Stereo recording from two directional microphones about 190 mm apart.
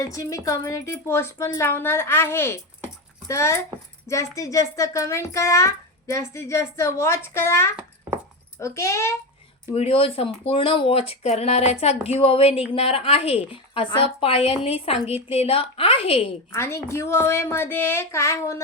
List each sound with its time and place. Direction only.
0.0 s a child's voice: 15° left (ahead or behind)
9.7 s a woman's voice: 30° left (ahead or behind)
16.5 s a child's voice: 15° left (ahead or behind)